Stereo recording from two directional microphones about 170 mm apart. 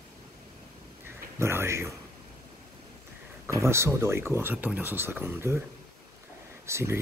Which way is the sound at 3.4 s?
15° right (ahead or behind).